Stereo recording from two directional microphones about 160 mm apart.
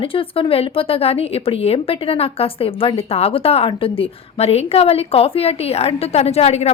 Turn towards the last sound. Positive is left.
turn(degrees=40)  # may be behind; listen again after turning